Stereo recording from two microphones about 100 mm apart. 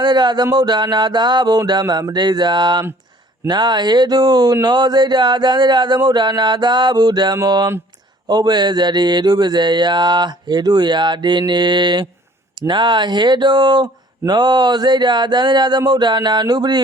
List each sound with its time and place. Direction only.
0.0 s speech: 45° right (ahead or behind)